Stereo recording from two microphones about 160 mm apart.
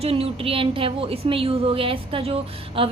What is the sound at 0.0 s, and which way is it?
A woman's voice, 35° right (ahead or behind).